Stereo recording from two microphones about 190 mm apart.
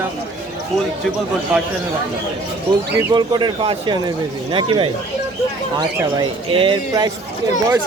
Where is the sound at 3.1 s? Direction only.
25° right (ahead or behind).